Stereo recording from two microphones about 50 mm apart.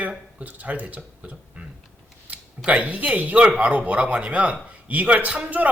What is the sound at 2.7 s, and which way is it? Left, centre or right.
Speech, right.